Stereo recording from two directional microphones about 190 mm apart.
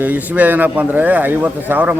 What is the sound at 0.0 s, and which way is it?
A man's voice, 10° right (ahead or behind).